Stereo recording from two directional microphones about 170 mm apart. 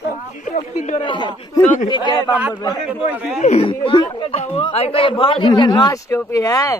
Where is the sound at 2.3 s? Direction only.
10° right (ahead or behind).